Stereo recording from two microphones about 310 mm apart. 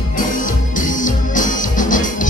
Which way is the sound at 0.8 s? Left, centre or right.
Left.